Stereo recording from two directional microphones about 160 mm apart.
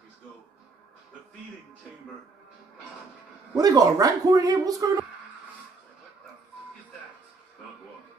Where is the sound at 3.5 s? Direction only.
20° right (ahead or behind).